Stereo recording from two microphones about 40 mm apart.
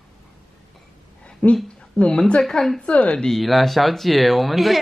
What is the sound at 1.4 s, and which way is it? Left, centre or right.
Speech, left.